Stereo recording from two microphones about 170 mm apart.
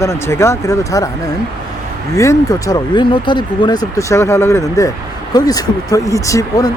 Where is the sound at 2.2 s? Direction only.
20° left (ahead or behind).